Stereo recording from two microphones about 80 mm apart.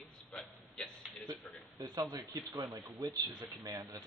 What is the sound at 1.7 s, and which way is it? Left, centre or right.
Speech, right.